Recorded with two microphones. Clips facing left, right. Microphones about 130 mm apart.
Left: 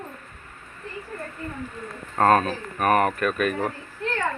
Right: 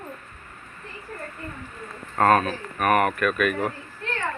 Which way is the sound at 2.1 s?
35° left (ahead or behind).